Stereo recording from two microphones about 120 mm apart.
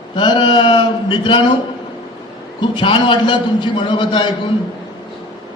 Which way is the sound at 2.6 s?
40° left (ahead or behind).